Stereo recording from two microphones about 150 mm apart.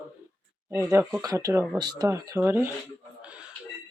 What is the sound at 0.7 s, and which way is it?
Speech, 15° right (ahead or behind).